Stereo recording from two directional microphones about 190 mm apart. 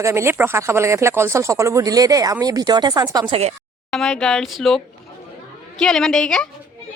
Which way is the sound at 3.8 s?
Centre (ahead or behind).